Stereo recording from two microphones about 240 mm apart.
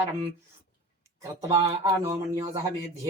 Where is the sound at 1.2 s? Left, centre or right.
Centre.